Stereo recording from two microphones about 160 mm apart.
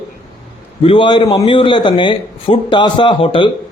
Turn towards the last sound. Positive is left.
turn(degrees=30)  # may be behind; listen again after turning